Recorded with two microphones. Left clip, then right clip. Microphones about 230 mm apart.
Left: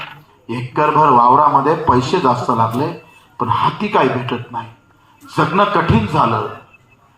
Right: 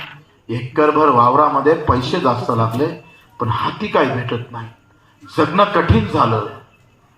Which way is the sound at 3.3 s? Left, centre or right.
Left.